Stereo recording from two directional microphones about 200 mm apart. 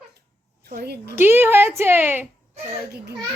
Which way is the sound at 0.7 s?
50° right (ahead or behind).